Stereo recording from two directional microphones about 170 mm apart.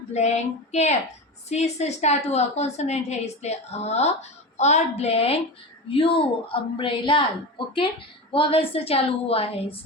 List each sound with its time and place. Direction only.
0.1 s a woman's voice: 40° left (ahead or behind)
8.3 s a woman's voice: 30° left (ahead or behind)